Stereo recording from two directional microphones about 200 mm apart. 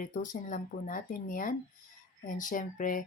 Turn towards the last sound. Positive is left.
turn(degrees=40)  # may be behind; listen again after turning